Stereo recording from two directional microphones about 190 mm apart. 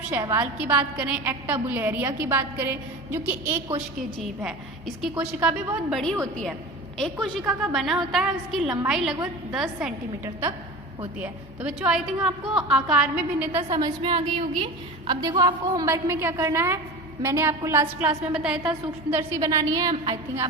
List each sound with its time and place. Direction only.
0.1 s a woman's voice: 10° right (ahead or behind)
11.2 s a woman's voice: 5° right (ahead or behind)
19.1 s a woman's voice: 15° right (ahead or behind)